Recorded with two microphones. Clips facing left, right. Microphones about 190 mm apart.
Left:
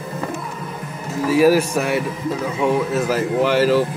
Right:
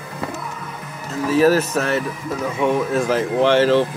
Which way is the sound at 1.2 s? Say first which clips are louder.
Left 1 dB; 10° left (ahead or behind).